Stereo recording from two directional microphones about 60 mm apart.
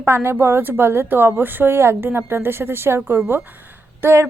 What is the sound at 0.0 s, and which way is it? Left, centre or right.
A woman's voice, right.